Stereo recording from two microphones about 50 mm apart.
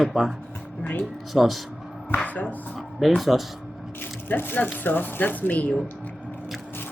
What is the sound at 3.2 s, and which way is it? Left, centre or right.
Speech, centre.